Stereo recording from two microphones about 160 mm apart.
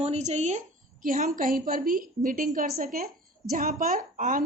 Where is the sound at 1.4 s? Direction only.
60° right (ahead or behind).